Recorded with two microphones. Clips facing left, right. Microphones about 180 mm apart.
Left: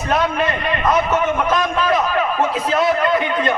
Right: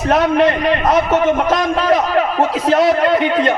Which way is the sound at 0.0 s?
70° right (ahead or behind).